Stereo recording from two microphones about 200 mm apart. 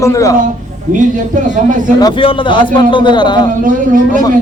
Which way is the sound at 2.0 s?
25° left (ahead or behind).